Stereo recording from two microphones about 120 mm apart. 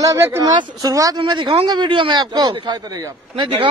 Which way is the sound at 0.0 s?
25° right (ahead or behind).